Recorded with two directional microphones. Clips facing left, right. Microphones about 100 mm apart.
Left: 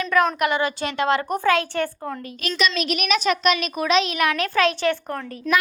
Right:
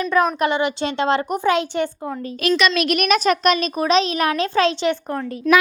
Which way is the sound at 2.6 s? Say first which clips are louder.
Right 1 dB; 70° right (ahead or behind).